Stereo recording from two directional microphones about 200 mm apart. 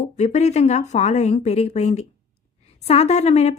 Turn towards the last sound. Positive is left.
turn(degrees=35)  # may be behind; listen again after turning